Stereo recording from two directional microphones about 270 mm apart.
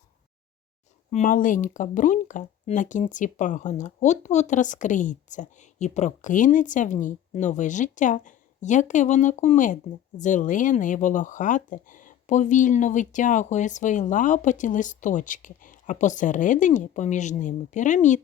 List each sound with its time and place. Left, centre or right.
1.1 s speech: left